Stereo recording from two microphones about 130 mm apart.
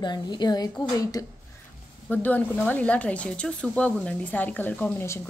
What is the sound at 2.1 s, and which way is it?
Speech, 15° left (ahead or behind).